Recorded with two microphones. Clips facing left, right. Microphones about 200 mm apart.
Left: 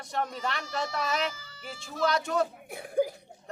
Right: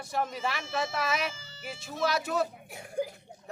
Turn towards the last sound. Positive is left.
turn(degrees=55)  # may be behind; listen again after turning